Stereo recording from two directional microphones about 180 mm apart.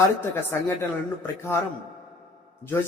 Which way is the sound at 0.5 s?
15° left (ahead or behind).